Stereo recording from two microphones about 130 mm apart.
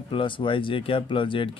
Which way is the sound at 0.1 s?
40° left (ahead or behind).